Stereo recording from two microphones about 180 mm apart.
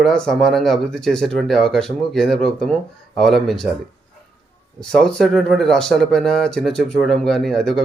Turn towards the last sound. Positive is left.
turn(degrees=0)  # may be behind; listen again after turning